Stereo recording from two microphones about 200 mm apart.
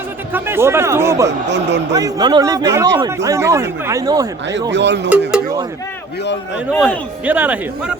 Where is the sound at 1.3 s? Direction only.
60° right (ahead or behind).